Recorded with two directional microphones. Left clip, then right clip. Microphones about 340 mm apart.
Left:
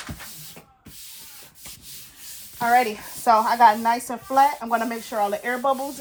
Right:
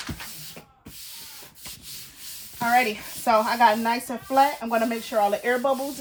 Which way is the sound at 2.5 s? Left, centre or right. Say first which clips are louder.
Left 2 dB; centre.